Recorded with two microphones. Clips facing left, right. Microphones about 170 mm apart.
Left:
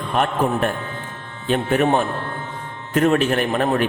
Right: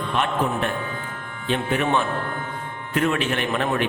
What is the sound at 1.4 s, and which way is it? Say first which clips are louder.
A man's voice: left 5 dB; 45° left (ahead or behind).